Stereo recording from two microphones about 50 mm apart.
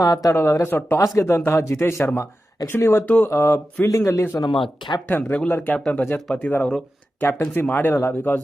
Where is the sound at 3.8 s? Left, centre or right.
Left.